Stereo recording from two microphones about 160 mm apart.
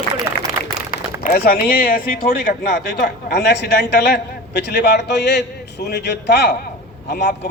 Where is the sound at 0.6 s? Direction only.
15° right (ahead or behind).